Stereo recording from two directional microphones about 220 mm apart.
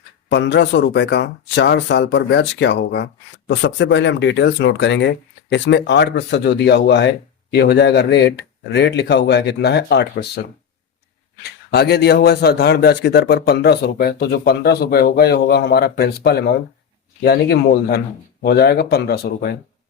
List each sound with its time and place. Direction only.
0.3 s speech: 55° left (ahead or behind)
11.7 s speech: 50° left (ahead or behind)